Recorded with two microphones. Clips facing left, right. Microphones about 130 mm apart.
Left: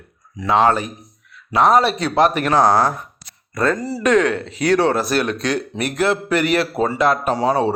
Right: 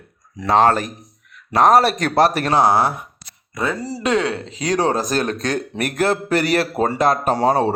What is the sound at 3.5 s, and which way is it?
Speech, 10° right (ahead or behind).